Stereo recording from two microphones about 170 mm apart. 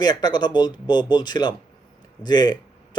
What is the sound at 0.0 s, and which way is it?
Speech, 25° left (ahead or behind).